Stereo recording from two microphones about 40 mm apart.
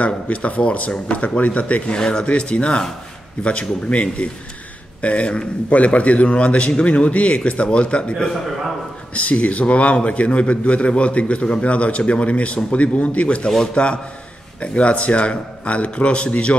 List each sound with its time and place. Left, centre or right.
0.0 s a man's voice: left
2.0 s a man's voice: left